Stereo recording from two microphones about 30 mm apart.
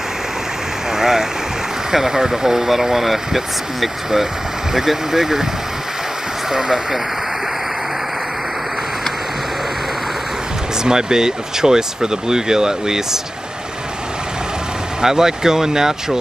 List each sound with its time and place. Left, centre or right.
0.9 s stream: centre
1.9 s speech: centre
6.5 s speech: centre
10.8 s speech: right
15.0 s speech: centre